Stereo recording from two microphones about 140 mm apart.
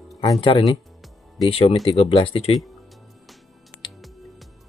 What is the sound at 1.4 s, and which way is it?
Speech, 45° left (ahead or behind).